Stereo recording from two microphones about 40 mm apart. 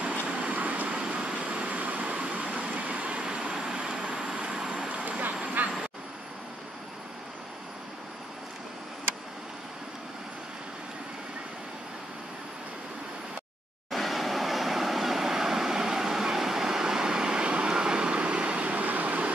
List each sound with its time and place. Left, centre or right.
0.0 s vehicle: right
0.8 s vehicle: right
2.0 s a sound: right
2.3 s vehicle: right; by 4.8 s centre
4.8 s vehicle: right
5.6 s vehicle: right
13.9 s vehicle: centre; by 19.3 s right